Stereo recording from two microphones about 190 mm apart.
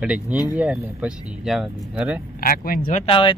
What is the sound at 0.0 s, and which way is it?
Speech, 5° right (ahead or behind).